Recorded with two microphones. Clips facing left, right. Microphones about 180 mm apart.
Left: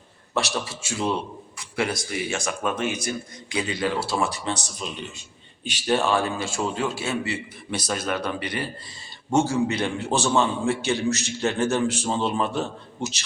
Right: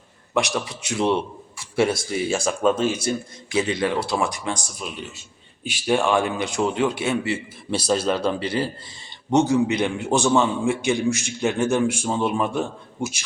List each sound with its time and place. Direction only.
0.3 s a man's voice: 20° right (ahead or behind)
7.8 s a man's voice: 30° right (ahead or behind); by 13.2 s 10° right (ahead or behind)